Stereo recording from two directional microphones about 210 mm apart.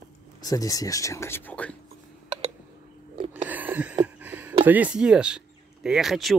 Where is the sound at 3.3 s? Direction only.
10° right (ahead or behind).